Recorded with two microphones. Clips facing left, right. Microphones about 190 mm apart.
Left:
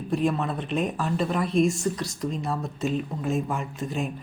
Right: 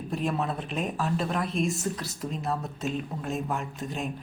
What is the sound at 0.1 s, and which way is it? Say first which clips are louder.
Speech: left 4 dB; centre (ahead or behind).